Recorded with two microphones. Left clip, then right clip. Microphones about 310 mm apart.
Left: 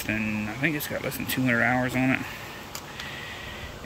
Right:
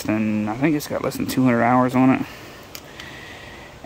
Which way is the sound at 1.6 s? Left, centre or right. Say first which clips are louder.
Right 8 dB; right.